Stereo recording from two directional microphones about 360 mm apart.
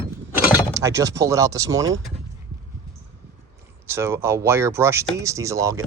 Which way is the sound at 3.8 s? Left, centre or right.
Centre.